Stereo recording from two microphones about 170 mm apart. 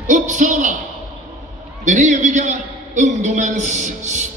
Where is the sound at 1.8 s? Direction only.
45° right (ahead or behind).